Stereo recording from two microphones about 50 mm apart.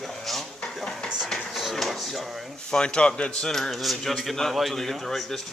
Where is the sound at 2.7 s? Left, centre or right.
Centre.